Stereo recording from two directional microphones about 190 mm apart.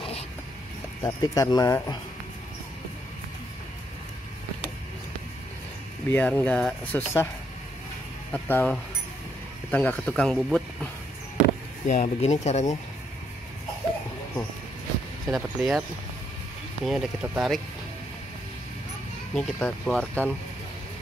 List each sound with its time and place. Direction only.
1.0 s speech: 15° left (ahead or behind)
6.0 s speech: 10° left (ahead or behind)
8.3 s speech: 5° left (ahead or behind)
11.4 s speech: 40° left (ahead or behind)
15.3 s speech: centre (ahead or behind)
16.8 s speech: centre (ahead or behind)
19.3 s speech: 5° left (ahead or behind)